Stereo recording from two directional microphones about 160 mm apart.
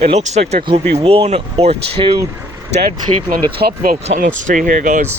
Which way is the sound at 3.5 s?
75° right (ahead or behind).